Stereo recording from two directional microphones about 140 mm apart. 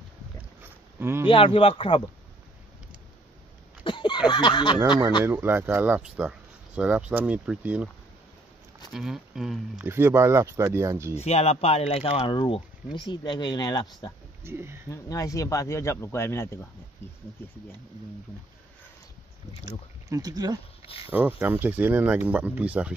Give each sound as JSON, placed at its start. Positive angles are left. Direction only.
{"t": 0.6, "sound": "a sound", "side_deg": -15}
{"t": 1.3, "sound": "speech", "side_deg": 40}
{"t": 3.8, "sound": "a sound", "side_deg": 35}
{"t": 5.2, "sound": "speech", "side_deg": -15}
{"t": 8.9, "sound": "speech", "side_deg": -5}
{"t": 9.8, "sound": "speech", "side_deg": -15}
{"t": 11.1, "sound": "speech", "side_deg": 50}
{"t": 14.4, "sound": "speech", "side_deg": -20}
{"t": 14.9, "sound": "speech", "side_deg": 25}
{"t": 19.6, "sound": "speech", "side_deg": -25}
{"t": 21.1, "sound": "speech", "side_deg": -15}